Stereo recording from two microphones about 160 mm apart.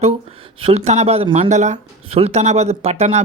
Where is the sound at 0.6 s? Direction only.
45° right (ahead or behind).